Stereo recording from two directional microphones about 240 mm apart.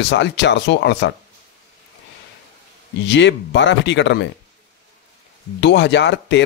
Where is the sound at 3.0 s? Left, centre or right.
Left.